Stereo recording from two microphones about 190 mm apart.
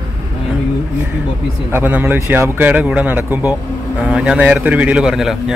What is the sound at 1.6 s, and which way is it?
A man's voice, 10° right (ahead or behind).